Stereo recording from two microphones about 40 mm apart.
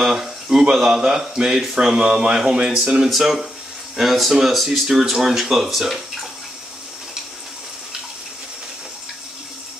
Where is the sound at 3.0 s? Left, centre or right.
Centre.